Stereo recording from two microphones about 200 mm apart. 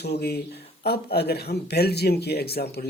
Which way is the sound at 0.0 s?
55° left (ahead or behind).